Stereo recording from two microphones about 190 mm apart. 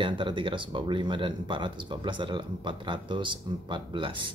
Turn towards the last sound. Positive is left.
turn(degrees=-25)  # may be behind; listen again after turning